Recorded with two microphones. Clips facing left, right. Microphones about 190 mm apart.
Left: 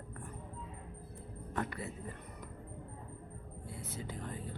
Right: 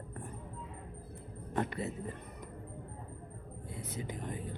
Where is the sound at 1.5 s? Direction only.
25° right (ahead or behind).